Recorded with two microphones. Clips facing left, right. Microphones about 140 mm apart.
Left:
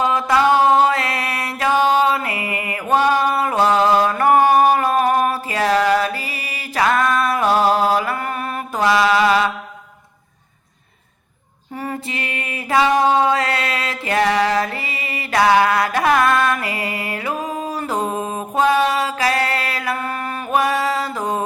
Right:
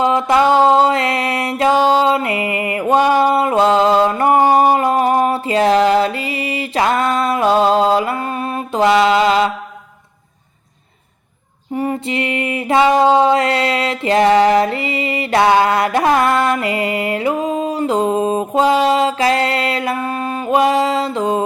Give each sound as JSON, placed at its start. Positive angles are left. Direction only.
{"t": 0.0, "sound": "mantra", "side_deg": -20}
{"t": 11.7, "sound": "music", "side_deg": -20}